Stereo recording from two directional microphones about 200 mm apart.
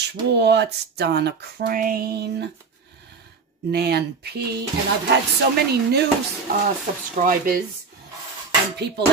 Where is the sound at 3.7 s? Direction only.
55° right (ahead or behind).